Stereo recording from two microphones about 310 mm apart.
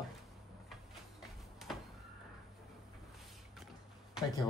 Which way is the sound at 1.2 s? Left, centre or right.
Centre.